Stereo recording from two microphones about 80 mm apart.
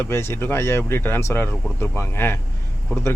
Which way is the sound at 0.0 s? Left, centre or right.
Left.